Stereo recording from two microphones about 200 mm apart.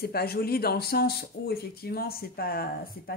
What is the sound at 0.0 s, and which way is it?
Speech, 50° left (ahead or behind).